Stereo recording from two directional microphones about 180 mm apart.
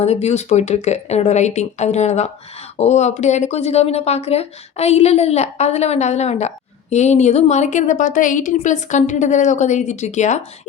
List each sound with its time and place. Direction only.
0.0 s speech: 35° left (ahead or behind)